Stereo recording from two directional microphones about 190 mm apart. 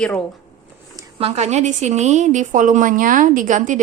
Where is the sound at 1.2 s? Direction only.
35° right (ahead or behind).